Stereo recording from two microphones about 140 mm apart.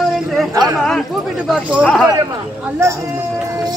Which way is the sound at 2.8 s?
20° right (ahead or behind).